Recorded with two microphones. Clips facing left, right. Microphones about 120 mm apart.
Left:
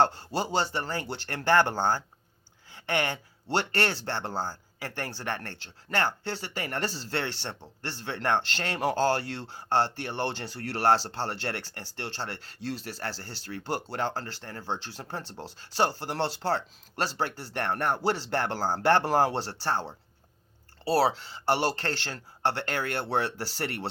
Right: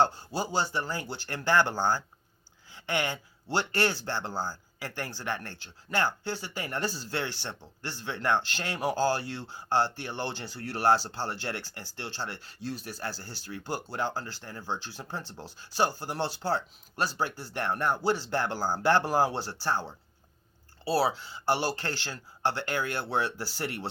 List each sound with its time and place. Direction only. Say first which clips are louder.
0.5 s speech: even; 65° left (ahead or behind)
20.9 s speech: left 2 dB; 65° left (ahead or behind)